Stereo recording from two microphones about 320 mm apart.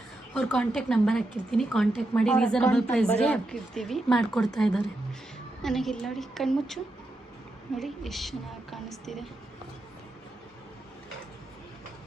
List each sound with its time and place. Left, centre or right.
0.3 s speech: centre
7.8 s speech: centre